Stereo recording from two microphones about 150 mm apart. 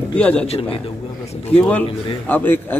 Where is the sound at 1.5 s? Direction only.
10° left (ahead or behind).